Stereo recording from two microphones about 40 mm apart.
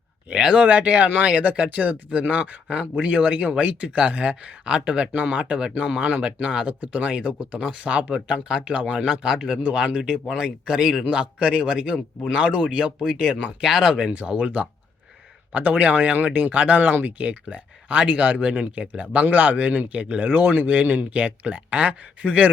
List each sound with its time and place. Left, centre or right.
0.3 s speech: right
0.7 s speech: right